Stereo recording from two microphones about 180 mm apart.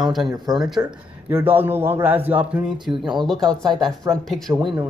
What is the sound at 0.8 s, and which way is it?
A man's voice, 15° right (ahead or behind).